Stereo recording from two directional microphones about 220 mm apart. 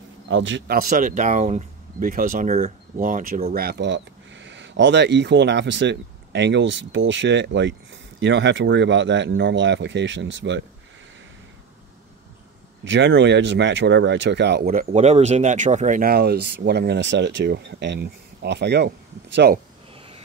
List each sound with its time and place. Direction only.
0.3 s speech: 55° right (ahead or behind)
12.8 s speech: 55° right (ahead or behind)
19.9 s a sound: 25° right (ahead or behind)